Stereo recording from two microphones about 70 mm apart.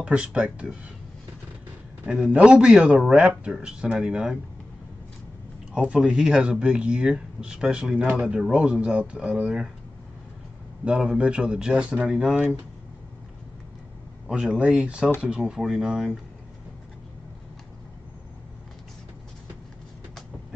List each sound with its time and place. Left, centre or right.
0.0 s speech: centre
2.0 s speech: centre
5.7 s speech: centre
7.9 s speech: right
10.9 s speech: centre
14.2 s speech: centre